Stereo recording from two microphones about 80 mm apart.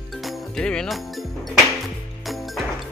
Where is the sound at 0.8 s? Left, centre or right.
Centre.